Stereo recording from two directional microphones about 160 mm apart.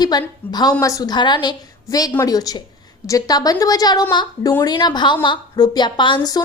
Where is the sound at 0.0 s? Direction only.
25° left (ahead or behind).